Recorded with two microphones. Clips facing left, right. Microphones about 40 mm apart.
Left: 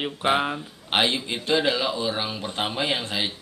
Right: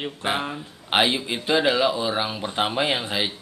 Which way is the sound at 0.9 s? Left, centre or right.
Centre.